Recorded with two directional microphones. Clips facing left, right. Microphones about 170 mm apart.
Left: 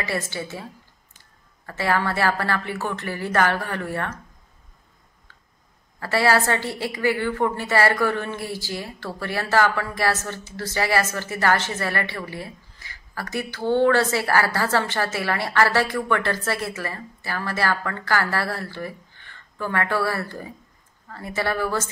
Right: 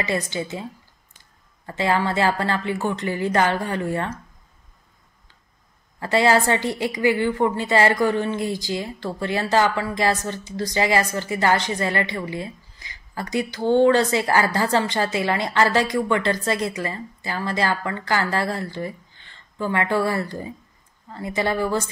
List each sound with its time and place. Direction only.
0.0 s a woman's voice: 20° right (ahead or behind)
1.7 s a woman's voice: 20° right (ahead or behind)
5.9 s a woman's voice: 20° right (ahead or behind)